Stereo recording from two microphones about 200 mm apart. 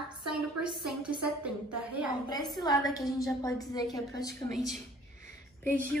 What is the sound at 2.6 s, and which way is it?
A woman's voice, 20° left (ahead or behind).